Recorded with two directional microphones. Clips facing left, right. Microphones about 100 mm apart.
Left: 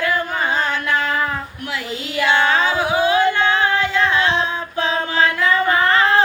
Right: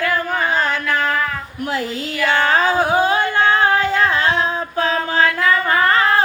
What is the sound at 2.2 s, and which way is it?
Music, 40° right (ahead or behind).